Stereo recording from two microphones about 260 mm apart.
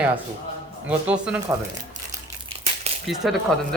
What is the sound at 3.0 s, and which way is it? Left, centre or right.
Speech, centre.